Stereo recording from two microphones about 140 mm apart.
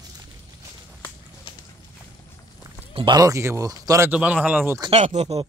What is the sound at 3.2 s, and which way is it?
Speech, 20° right (ahead or behind).